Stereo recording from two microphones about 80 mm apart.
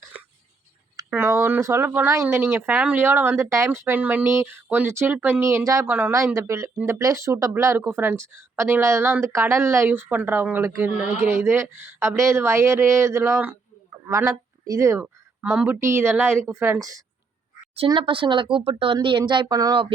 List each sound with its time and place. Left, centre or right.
1.1 s speech: right
2.7 s speech: centre
3.0 s speech: right
5.8 s speech: right
6.1 s speech: right; by 11.1 s centre
11.2 s speech: right
13.9 s a sound: right
14.3 s speech: right
15.0 s speech: centre
15.8 s speech: right
17.8 s a woman's voice: right
19.5 s speech: right